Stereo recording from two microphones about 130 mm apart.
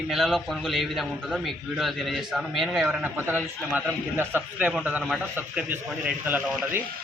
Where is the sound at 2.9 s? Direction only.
10° right (ahead or behind).